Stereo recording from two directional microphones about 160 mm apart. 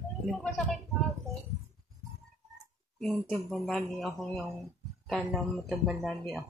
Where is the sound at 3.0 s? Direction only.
5° left (ahead or behind).